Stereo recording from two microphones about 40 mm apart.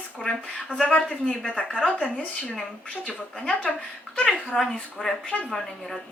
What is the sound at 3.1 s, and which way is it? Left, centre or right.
Speech, left.